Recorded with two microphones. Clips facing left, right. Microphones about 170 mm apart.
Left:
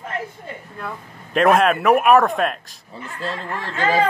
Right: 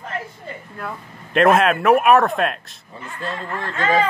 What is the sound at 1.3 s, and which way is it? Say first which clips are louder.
Speech: even; centre (ahead or behind).